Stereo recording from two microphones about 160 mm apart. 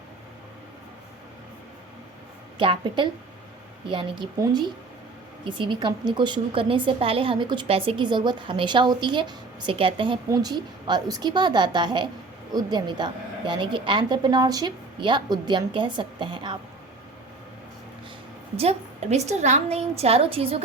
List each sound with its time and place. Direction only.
2.6 s a woman's voice: 30° right (ahead or behind)
18.5 s a woman's voice: 40° right (ahead or behind)